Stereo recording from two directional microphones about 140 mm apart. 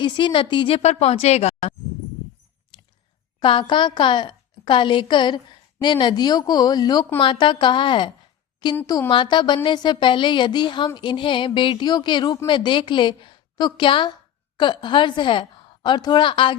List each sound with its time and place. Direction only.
0.0 s a woman's voice: 35° left (ahead or behind)
0.8 s speech: 50° left (ahead or behind)
3.4 s a woman's voice: 35° left (ahead or behind)